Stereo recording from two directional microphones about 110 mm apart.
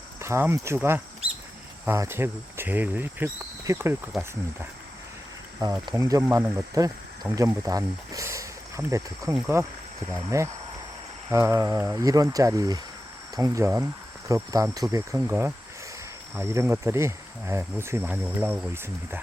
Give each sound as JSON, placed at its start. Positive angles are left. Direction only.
{"t": 0.2, "sound": "speech", "side_deg": -20}
{"t": 5.9, "sound": "speech", "side_deg": -30}
{"t": 6.2, "sound": "speech", "side_deg": -20}
{"t": 6.8, "sound": "speech", "side_deg": -35}